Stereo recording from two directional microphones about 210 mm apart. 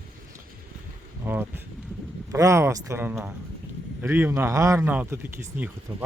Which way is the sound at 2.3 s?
15° right (ahead or behind).